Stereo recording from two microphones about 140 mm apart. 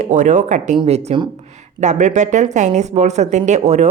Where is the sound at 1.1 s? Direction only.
45° right (ahead or behind).